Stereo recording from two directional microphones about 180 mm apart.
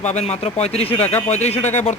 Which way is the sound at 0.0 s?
40° left (ahead or behind).